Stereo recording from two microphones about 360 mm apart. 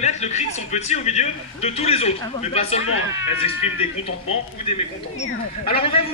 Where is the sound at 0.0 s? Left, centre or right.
Centre.